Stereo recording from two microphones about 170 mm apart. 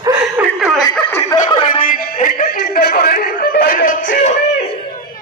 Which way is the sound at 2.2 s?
60° left (ahead or behind).